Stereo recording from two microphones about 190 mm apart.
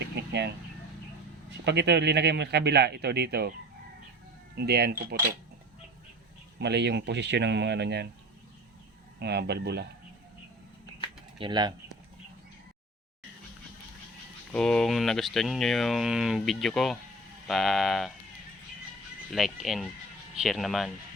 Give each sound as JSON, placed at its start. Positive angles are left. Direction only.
{"t": 0.2, "sound": "vehicle", "side_deg": -65}
{"t": 1.6, "sound": "speech", "side_deg": -65}
{"t": 4.5, "sound": "speech", "side_deg": -60}
{"t": 6.6, "sound": "speech", "side_deg": -60}
{"t": 9.1, "sound": "speech", "side_deg": -60}
{"t": 11.3, "sound": "speech", "side_deg": -25}
{"t": 14.5, "sound": "speech", "side_deg": 5}
{"t": 19.3, "sound": "speech", "side_deg": 0}